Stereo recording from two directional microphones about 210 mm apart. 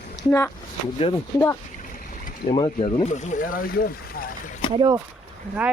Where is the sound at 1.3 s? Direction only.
15° left (ahead or behind).